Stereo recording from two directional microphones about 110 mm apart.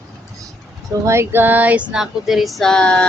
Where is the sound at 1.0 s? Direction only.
25° right (ahead or behind).